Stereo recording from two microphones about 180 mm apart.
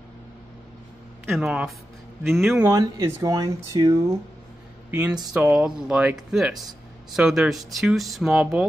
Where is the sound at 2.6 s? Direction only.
20° right (ahead or behind).